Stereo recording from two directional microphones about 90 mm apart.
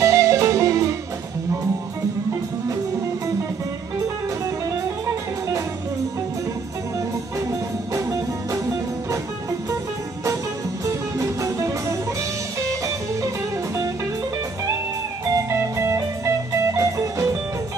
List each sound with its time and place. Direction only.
0.0 s music: 35° right (ahead or behind)
7.9 s music: 35° right (ahead or behind)
10.9 s music: 35° right (ahead or behind)
15.5 s music: 35° right (ahead or behind)